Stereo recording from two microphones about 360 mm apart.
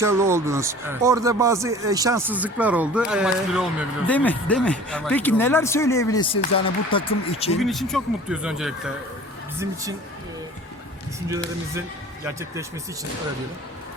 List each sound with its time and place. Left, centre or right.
0.0 s speech: centre
7.6 s speech: centre